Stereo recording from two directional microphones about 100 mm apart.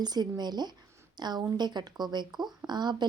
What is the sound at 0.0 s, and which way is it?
Speech, 45° right (ahead or behind).